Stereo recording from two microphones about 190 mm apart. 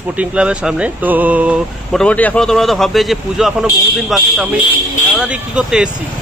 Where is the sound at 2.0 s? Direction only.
5° left (ahead or behind).